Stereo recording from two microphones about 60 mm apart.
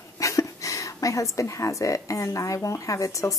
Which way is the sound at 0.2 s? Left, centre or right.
Left.